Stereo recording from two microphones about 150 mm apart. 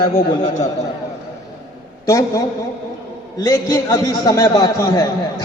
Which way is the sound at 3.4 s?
25° left (ahead or behind).